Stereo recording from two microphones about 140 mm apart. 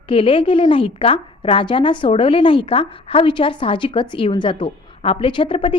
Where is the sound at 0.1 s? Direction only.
40° left (ahead or behind).